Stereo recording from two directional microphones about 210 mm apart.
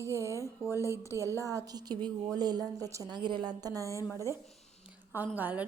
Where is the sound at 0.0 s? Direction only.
15° right (ahead or behind).